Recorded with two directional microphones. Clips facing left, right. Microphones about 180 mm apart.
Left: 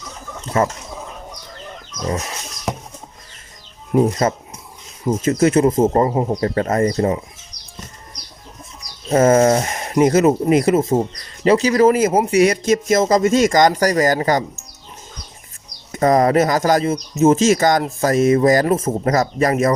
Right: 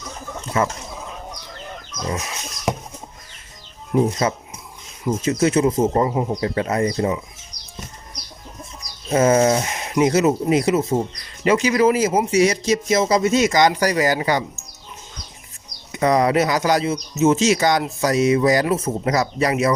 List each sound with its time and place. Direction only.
0.6 s fowl: 40° left (ahead or behind)
2.7 s a sound: 10° right (ahead or behind)
3.9 s speech: 50° left (ahead or behind)
9.1 s speech: 50° left (ahead or behind)
11.4 s speech: 35° left (ahead or behind)
15.9 s speech: 45° left (ahead or behind)